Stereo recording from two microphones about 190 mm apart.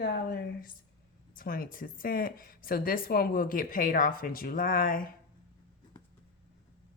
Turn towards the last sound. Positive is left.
turn(degrees=50)  # may be behind; listen again after turning